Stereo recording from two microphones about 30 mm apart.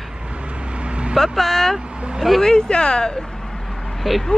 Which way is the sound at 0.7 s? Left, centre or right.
Right.